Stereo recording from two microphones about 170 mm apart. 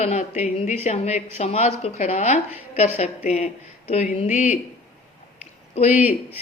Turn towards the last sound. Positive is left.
turn(degrees=40)  # may be behind; listen again after turning